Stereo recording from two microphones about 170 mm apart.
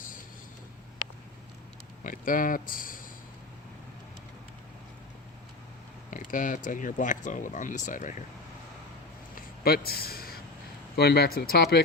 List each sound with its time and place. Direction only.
2.0 s speech: 55° left (ahead or behind)
6.1 s speech: 50° left (ahead or behind)
9.3 s a sound: 65° left (ahead or behind)
10.9 s speech: 70° left (ahead or behind)